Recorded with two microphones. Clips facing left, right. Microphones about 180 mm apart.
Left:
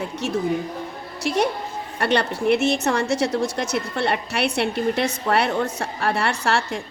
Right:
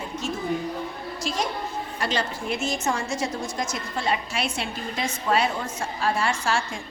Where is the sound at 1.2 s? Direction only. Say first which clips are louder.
Left 7 dB; 65° left (ahead or behind).